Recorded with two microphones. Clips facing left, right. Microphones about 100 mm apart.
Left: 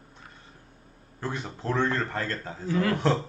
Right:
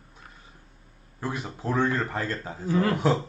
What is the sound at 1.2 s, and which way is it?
A man's voice, 5° right (ahead or behind).